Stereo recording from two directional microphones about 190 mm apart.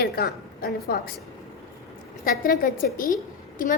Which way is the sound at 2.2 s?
45° left (ahead or behind).